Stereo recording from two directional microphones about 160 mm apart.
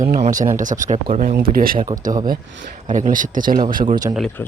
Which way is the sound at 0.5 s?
55° right (ahead or behind).